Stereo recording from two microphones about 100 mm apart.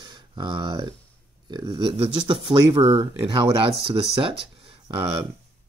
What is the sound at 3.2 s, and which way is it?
Speech, 55° right (ahead or behind).